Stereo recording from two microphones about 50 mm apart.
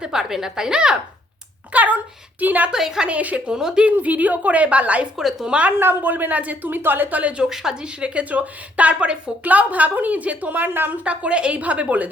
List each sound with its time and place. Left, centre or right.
0.0 s a woman's voice: centre
1.7 s a sound: right
2.4 s speech: right
2.7 s a woman's voice: centre
3.1 s a woman's voice: right
3.5 s a woman's voice: centre
3.9 s a woman's voice: right
5.1 s a woman's voice: centre
5.5 s a woman's voice: right
5.7 s speech: right
7.4 s a woman's voice: centre; by 10.9 s right
11.0 s a woman's voice: right